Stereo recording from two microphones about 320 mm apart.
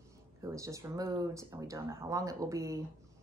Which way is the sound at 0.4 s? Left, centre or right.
Centre.